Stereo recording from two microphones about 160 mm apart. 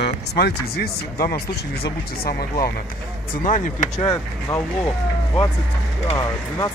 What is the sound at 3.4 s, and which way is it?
Speech, 50° left (ahead or behind).